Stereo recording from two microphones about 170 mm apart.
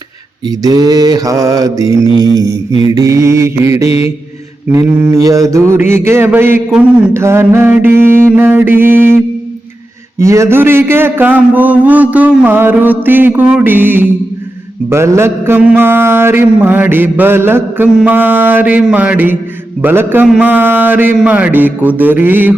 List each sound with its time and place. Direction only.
0.4 s mantra: 20° right (ahead or behind)
10.2 s mantra: 15° right (ahead or behind)